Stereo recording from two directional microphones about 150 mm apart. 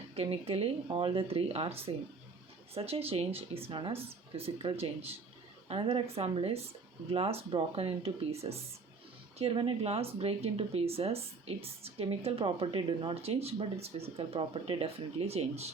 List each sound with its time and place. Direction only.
0.2 s speech: 40° right (ahead or behind)